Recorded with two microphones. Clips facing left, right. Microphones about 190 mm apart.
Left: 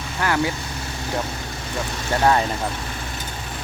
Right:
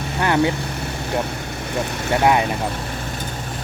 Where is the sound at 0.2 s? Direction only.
20° right (ahead or behind).